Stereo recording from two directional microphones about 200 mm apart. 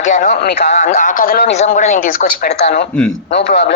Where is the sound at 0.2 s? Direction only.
45° left (ahead or behind).